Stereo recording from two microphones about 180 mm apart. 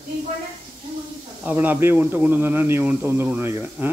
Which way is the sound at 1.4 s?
10° right (ahead or behind).